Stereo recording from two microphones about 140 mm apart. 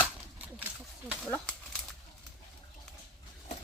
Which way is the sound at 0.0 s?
10° right (ahead or behind).